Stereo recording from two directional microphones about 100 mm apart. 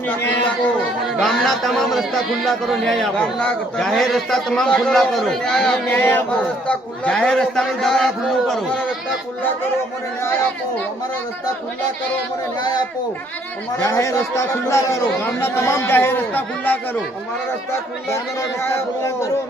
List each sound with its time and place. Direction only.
1.2 s a man's voice: centre (ahead or behind)
13.8 s speech: 30° left (ahead or behind)
18.6 s speech: 30° left (ahead or behind)